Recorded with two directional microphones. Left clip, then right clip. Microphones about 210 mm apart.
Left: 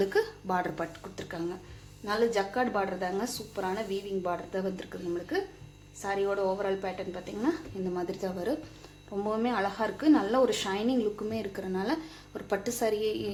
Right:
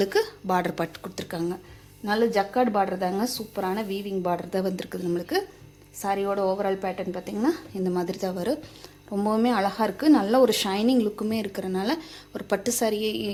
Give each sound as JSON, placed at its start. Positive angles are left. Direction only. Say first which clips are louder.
{"t": 0.0, "sound": "a woman's voice", "louder": "right 4 dB", "side_deg": -40}